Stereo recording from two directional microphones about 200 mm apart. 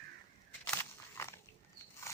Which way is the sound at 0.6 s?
15° left (ahead or behind).